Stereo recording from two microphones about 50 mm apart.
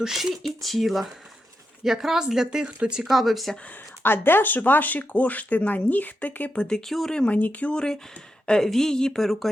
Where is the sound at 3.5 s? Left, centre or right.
Left.